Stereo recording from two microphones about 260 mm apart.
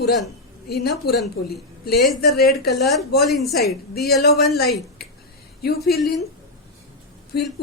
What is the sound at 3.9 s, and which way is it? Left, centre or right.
Speech, left.